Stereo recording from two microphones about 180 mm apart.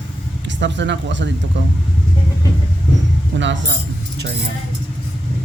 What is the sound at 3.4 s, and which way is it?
Speech, 90° right.